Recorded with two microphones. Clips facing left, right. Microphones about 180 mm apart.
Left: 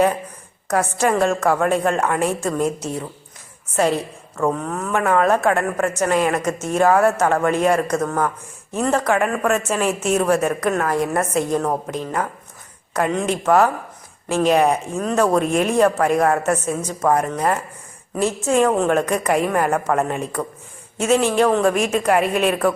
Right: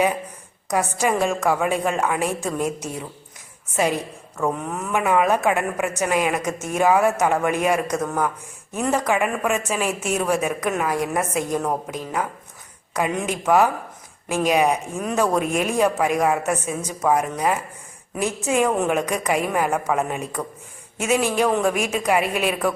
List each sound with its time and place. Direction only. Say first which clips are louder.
0.9 s a woman's voice: left 4 dB; 5° right (ahead or behind)
4.5 s a woman's voice: left 2 dB; 15° right (ahead or behind)